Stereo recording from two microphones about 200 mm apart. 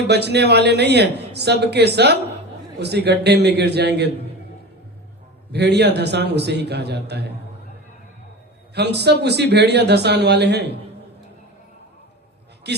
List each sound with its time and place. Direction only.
0.1 s a woman's voice: 55° right (ahead or behind)
5.5 s a woman's voice: 55° right (ahead or behind)
8.7 s a woman's voice: 55° right (ahead or behind)
12.7 s a man's voice: 55° right (ahead or behind)